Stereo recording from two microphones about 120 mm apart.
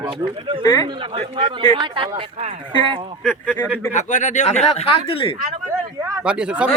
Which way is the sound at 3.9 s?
90° left.